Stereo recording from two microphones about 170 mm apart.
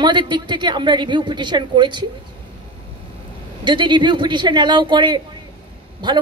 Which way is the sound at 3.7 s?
25° right (ahead or behind).